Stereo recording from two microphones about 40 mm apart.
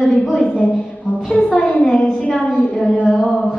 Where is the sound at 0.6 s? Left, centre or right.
Left.